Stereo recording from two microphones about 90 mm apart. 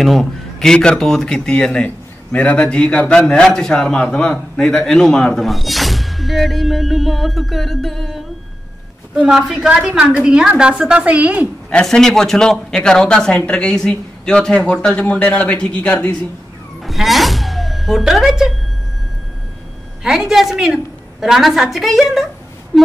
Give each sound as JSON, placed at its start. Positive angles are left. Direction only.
{"t": 0.0, "sound": "a man's voice", "side_deg": 0}
{"t": 11.7, "sound": "speech", "side_deg": 5}
{"t": 16.8, "sound": "music", "side_deg": 0}
{"t": 20.0, "sound": "a man's voice", "side_deg": -5}
{"t": 22.7, "sound": "a sound", "side_deg": 5}